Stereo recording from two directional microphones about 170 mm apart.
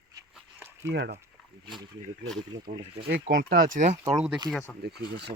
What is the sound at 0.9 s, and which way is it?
Speech, 90° right.